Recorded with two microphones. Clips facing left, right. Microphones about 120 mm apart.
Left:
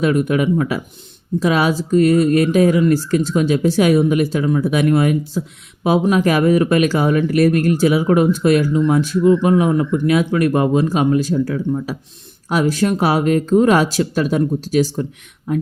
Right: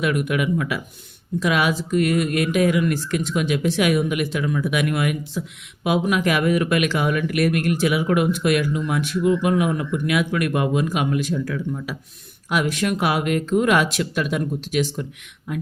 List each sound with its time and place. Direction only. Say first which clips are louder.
0.0 s speech: left 6 dB; 30° left (ahead or behind)